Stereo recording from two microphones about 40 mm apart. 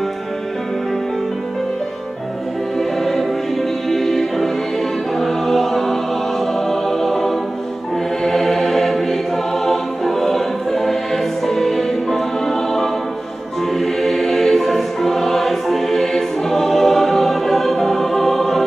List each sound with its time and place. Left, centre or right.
3.9 s music: centre
5.2 s choir: centre
6.7 s music: centre